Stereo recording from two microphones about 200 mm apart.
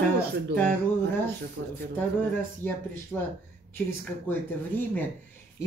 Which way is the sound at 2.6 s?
10° left (ahead or behind).